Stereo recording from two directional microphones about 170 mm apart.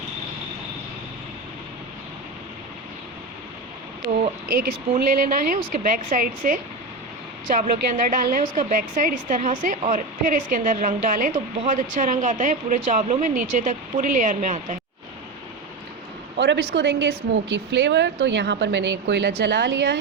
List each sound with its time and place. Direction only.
4.2 s a woman's voice: 55° right (ahead or behind)
16.4 s a woman's voice: 90° right